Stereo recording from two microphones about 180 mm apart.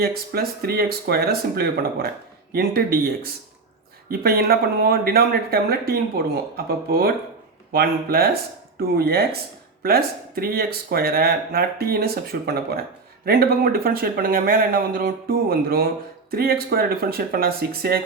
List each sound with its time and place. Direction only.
0.0 s speech: 60° right (ahead or behind)